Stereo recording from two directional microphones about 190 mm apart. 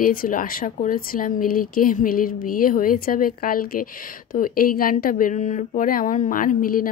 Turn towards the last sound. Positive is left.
turn(degrees=45)  # may be behind; listen again after turning